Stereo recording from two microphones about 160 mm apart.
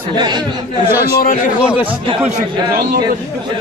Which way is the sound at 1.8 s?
35° right (ahead or behind).